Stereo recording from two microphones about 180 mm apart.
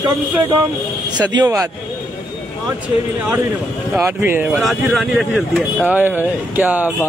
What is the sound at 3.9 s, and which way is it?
Speech, 15° right (ahead or behind).